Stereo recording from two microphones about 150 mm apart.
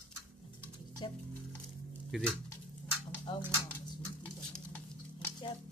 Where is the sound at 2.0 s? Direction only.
5° left (ahead or behind).